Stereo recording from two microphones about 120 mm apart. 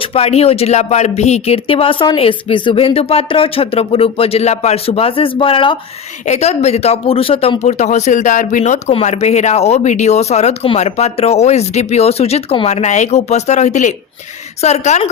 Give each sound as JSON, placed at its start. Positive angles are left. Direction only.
{"t": 0.0, "sound": "speech", "side_deg": 55}
{"t": 6.2, "sound": "speech", "side_deg": 70}
{"t": 9.0, "sound": "speech", "side_deg": 70}
{"t": 14.6, "sound": "speech", "side_deg": 65}